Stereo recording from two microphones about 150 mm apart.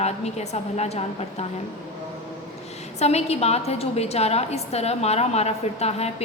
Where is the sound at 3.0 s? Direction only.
45° left (ahead or behind).